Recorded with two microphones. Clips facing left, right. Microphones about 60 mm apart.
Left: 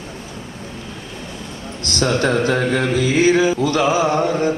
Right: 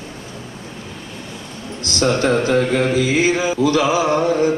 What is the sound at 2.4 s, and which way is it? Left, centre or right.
Mantra, left.